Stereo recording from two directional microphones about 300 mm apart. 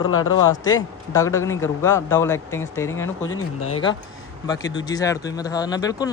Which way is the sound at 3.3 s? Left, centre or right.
Left.